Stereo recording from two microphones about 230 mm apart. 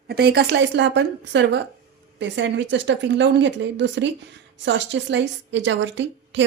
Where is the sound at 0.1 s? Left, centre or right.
Right.